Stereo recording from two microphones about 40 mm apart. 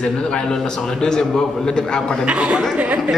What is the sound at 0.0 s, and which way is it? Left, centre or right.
A man's voice, centre.